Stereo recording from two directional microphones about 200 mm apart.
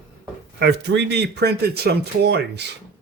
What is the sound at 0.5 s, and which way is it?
Speech, 60° right (ahead or behind).